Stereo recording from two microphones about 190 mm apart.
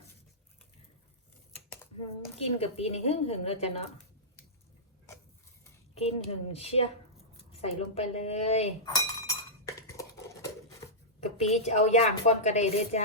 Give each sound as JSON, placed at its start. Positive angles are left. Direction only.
{"t": 2.4, "sound": "a woman's voice", "side_deg": 30}
{"t": 5.9, "sound": "a woman's voice", "side_deg": 30}
{"t": 8.8, "sound": "chink", "side_deg": 15}
{"t": 11.2, "sound": "a woman's voice", "side_deg": 35}